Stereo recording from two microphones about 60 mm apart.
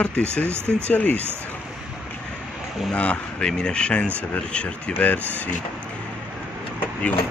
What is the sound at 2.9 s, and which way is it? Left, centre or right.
Speech, left.